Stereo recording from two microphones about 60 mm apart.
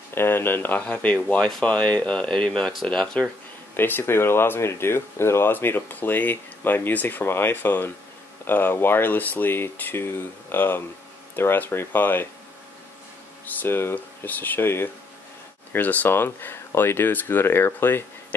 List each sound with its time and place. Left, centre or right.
0.1 s speech: left; by 3.3 s centre
3.7 s speech: left
13.5 s speech: left
13.9 s speech: left